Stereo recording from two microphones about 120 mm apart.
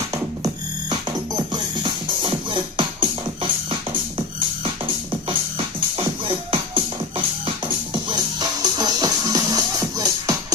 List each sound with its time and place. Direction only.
1.5 s music: 40° right (ahead or behind)
5.3 s music: 45° right (ahead or behind)